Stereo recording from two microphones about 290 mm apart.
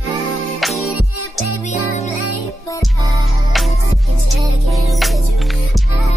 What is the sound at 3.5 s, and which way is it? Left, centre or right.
Music, centre.